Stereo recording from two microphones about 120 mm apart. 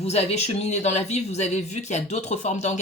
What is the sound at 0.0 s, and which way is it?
Speech, 60° left (ahead or behind).